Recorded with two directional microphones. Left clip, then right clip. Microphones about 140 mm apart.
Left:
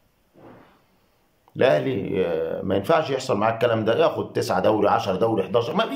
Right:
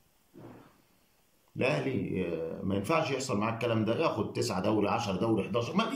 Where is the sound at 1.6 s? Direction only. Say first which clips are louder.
Left 11 dB; 15° right (ahead or behind).